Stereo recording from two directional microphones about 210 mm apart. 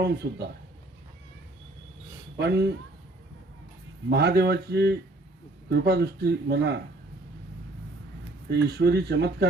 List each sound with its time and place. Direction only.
0.0 s speech: 50° right (ahead or behind)
2.4 s speech: 55° right (ahead or behind)
4.1 s speech: 50° right (ahead or behind)
8.4 s speech: 50° right (ahead or behind)